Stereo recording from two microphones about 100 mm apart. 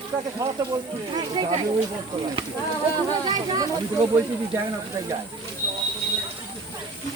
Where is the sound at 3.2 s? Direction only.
40° right (ahead or behind).